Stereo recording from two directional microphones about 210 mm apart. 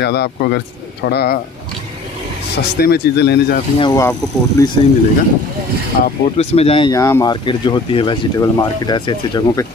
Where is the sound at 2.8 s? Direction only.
50° left (ahead or behind).